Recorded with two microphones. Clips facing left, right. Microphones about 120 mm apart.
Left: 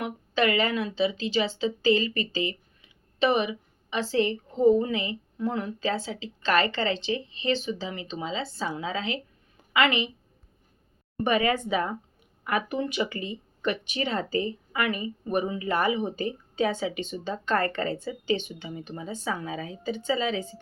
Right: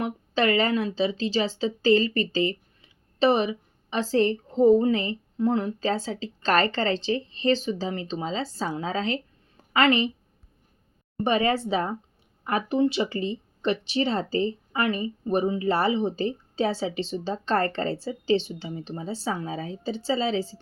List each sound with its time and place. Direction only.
0.0 s speech: 35° right (ahead or behind)
11.2 s speech: 30° right (ahead or behind)